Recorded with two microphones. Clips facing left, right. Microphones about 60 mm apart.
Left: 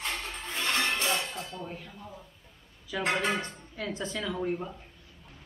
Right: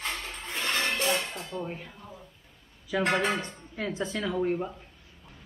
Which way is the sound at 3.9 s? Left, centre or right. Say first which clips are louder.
Right 4 dB; right.